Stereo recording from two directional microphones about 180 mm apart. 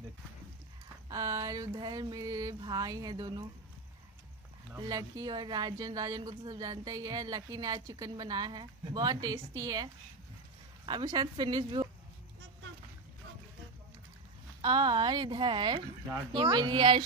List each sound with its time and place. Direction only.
1.0 s speech: 20° right (ahead or behind)
4.7 s speech: 20° right (ahead or behind)
10.9 s speech: 25° right (ahead or behind)
14.6 s speech: 25° right (ahead or behind)